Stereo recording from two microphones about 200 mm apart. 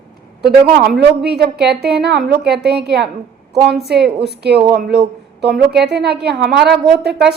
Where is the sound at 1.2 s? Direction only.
55° right (ahead or behind).